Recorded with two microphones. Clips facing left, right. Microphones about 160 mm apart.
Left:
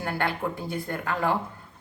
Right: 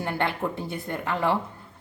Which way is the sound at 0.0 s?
20° right (ahead or behind).